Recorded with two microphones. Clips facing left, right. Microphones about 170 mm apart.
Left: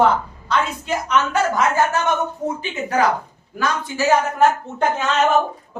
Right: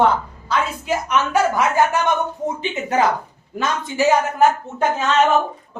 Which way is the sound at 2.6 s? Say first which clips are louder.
Right 1 dB; 20° right (ahead or behind).